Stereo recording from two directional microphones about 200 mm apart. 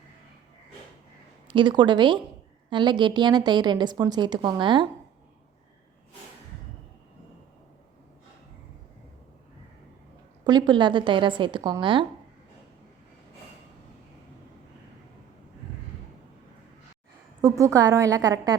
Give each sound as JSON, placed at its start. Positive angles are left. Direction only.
{"t": 1.5, "sound": "a woman's voice", "side_deg": -25}
{"t": 10.4, "sound": "a woman's voice", "side_deg": -20}
{"t": 17.6, "sound": "a woman's voice", "side_deg": -15}